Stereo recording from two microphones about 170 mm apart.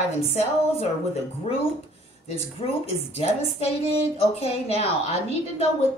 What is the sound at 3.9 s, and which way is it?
A woman's voice, 35° left (ahead or behind).